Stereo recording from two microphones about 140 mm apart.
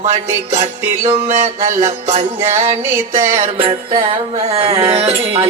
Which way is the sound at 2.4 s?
15° right (ahead or behind).